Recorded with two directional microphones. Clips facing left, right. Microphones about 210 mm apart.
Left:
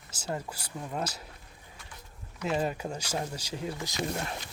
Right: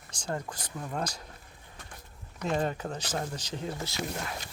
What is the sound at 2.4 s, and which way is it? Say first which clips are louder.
Speech: even; 10° left (ahead or behind).